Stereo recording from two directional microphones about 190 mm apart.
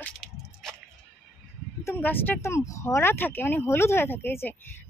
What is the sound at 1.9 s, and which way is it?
Speech, 10° left (ahead or behind).